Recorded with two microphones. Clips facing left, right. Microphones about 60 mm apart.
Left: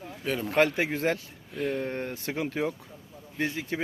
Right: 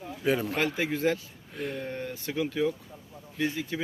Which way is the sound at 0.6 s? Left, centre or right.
Left.